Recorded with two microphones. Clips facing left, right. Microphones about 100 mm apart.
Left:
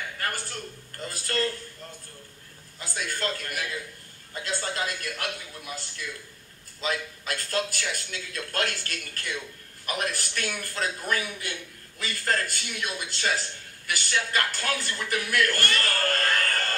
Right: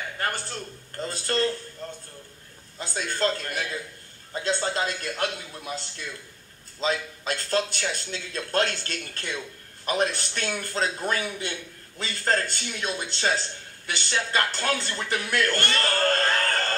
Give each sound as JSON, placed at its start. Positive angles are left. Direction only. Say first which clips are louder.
{"t": 0.2, "sound": "a man's voice", "louder": "right 3 dB", "side_deg": -25}
{"t": 2.8, "sound": "a man's voice", "louder": "right 5 dB", "side_deg": -30}